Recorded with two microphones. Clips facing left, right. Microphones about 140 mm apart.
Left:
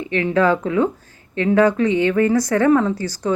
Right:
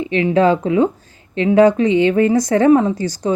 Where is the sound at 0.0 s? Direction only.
20° right (ahead or behind).